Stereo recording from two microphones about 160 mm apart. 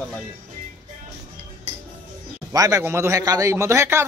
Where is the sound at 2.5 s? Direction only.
20° right (ahead or behind).